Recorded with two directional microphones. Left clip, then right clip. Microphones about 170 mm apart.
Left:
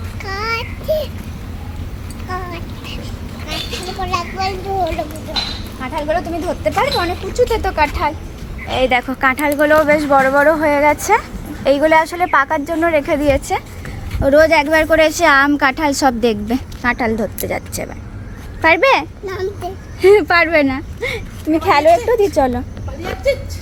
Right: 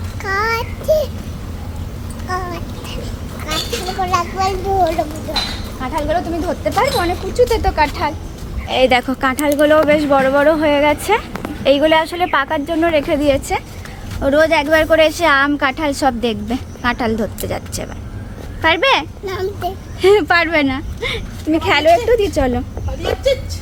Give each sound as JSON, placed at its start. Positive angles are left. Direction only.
{"t": 0.3, "sound": "child singing", "side_deg": -30}
{"t": 4.0, "sound": "children playing", "side_deg": -30}
{"t": 4.8, "sound": "speech", "side_deg": -15}
{"t": 5.8, "sound": "a woman's voice", "side_deg": 25}
{"t": 8.7, "sound": "a woman's voice", "side_deg": -20}
{"t": 14.2, "sound": "a woman's voice", "side_deg": 20}
{"t": 16.8, "sound": "a woman's voice", "side_deg": 15}
{"t": 19.2, "sound": "speech", "side_deg": -5}
{"t": 20.0, "sound": "a woman's voice", "side_deg": 20}